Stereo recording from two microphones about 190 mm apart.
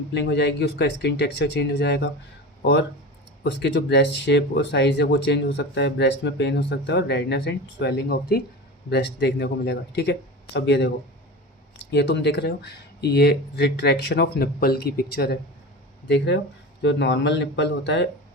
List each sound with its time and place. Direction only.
0.1 s speech: 65° left (ahead or behind)
3.4 s speech: 60° left (ahead or behind)
16.0 s speech: 65° left (ahead or behind)